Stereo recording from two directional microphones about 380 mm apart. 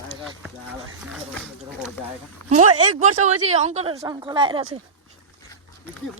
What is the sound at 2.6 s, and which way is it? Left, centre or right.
Speech, right.